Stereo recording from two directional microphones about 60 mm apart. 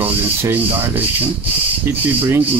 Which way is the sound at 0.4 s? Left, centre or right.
Right.